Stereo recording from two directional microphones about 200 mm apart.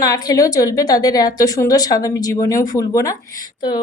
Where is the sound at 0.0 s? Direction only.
20° left (ahead or behind).